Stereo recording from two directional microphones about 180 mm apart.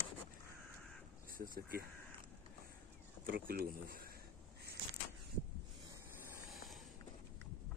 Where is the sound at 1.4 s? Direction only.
55° right (ahead or behind).